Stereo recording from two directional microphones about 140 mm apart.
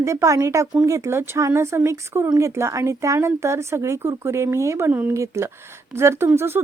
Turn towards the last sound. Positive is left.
turn(degrees=-15)  # may be behind; listen again after turning